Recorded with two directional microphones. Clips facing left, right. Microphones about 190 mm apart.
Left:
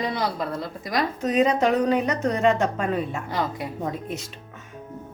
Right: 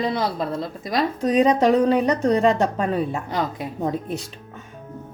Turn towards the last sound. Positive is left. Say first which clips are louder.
# right 4 dB
turn(degrees=-35)  # may be behind; listen again after turning